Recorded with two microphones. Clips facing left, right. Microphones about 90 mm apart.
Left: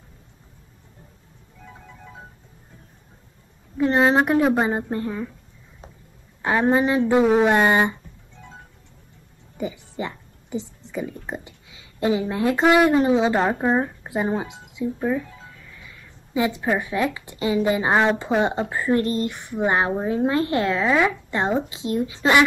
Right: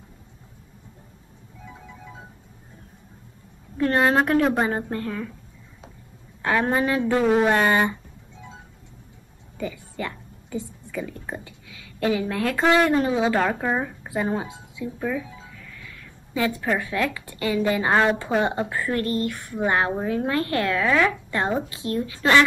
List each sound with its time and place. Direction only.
3.7 s speech: 15° left (ahead or behind)
6.4 s speech: 20° left (ahead or behind)
9.6 s a sound: 20° left (ahead or behind)
11.2 s speech: 20° left (ahead or behind)